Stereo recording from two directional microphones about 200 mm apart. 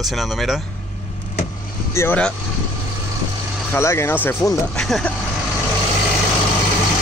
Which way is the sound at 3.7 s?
15° left (ahead or behind).